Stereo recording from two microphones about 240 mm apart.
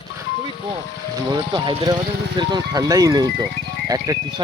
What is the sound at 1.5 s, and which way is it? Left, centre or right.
Speech, centre.